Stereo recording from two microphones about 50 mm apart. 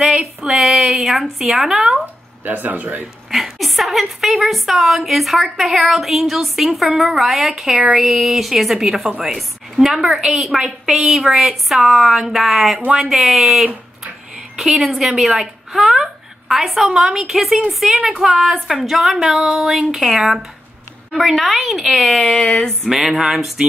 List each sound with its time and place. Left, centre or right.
0.0 s a woman's voice: centre
2.4 s speech: right
3.3 s a woman's voice: centre
15.0 s a woman's voice: centre
17.8 s speech: centre
18.2 s a woman's voice: centre
19.0 s a woman's voice: centre
22.4 s a sound: left
22.8 s a woman's voice: centre